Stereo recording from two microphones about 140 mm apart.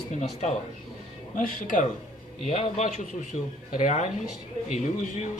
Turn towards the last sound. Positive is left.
turn(degrees=55)  # may be behind; listen again after turning